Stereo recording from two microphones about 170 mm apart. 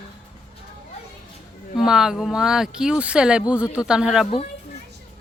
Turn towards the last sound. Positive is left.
turn(degrees=-5)  # may be behind; listen again after turning